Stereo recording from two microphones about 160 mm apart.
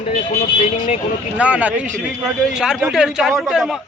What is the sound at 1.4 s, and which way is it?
A man's voice, 10° right (ahead or behind).